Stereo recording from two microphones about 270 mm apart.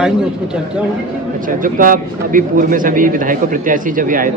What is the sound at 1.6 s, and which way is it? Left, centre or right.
A man's voice, right.